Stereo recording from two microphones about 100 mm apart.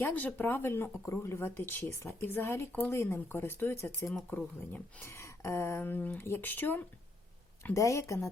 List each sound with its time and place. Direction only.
0.0 s speech: 15° left (ahead or behind)
7.6 s speech: 30° left (ahead or behind)